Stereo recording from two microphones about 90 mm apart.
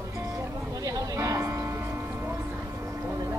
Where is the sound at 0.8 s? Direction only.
35° right (ahead or behind).